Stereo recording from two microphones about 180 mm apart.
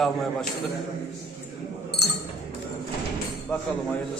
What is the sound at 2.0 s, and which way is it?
Chink, 65° left (ahead or behind).